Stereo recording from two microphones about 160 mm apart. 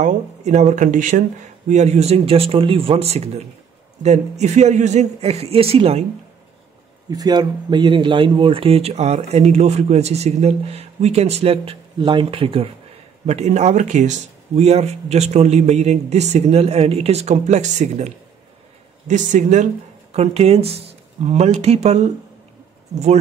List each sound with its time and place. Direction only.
0.0 s speech: 50° right (ahead or behind)
7.1 s speech: 25° right (ahead or behind); by 22.1 s 40° right (ahead or behind)